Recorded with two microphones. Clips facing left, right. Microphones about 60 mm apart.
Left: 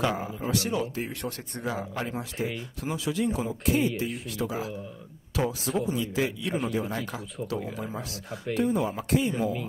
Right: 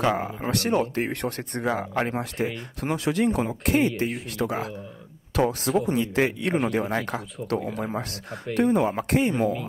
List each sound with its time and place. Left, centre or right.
0.0 s speech: right